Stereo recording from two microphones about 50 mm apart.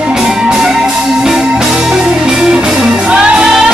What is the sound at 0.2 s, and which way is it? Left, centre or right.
Music, centre.